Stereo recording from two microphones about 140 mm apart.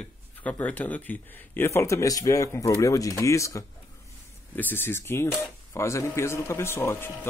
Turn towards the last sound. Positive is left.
turn(degrees=15)  # may be behind; listen again after turning